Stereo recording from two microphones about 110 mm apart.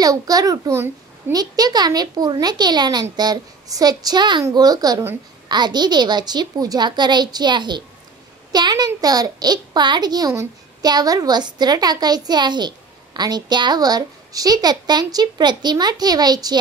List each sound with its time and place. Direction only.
0.0 s a woman's voice: 35° right (ahead or behind)
1.3 s a woman's voice: 35° right (ahead or behind)